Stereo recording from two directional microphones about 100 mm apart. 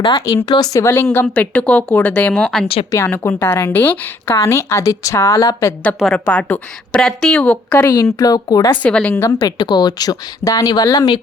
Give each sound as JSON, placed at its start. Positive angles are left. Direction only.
{"t": 0.1, "sound": "speech", "side_deg": 35}
{"t": 1.1, "sound": "a woman's voice", "side_deg": 20}
{"t": 2.9, "sound": "a woman's voice", "side_deg": 25}
{"t": 4.4, "sound": "speech", "side_deg": 30}
{"t": 6.1, "sound": "a woman's voice", "side_deg": 15}
{"t": 8.2, "sound": "speech", "side_deg": 40}
{"t": 8.8, "sound": "a woman's voice", "side_deg": 10}
{"t": 9.4, "sound": "speech", "side_deg": 45}